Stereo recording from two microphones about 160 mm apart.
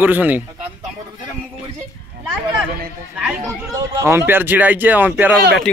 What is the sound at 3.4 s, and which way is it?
Speech, 20° right (ahead or behind).